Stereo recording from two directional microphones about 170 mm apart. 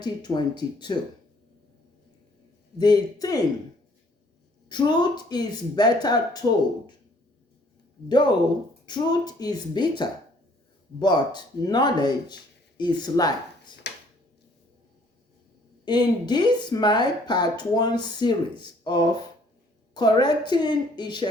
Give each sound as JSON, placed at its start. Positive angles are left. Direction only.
{"t": 0.0, "sound": "speech", "side_deg": 25}
{"t": 2.7, "sound": "speech", "side_deg": 25}
{"t": 4.7, "sound": "speech", "side_deg": 25}
{"t": 8.1, "sound": "speech", "side_deg": 25}
{"t": 15.8, "sound": "speech", "side_deg": 25}